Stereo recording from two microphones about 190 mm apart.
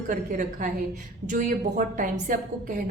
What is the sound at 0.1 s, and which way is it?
A woman's voice, 45° right (ahead or behind).